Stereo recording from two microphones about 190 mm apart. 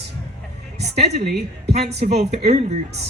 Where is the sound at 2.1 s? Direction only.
35° right (ahead or behind).